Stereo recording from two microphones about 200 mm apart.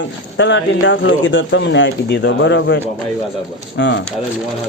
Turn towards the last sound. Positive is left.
turn(degrees=60)  # may be behind; listen again after turning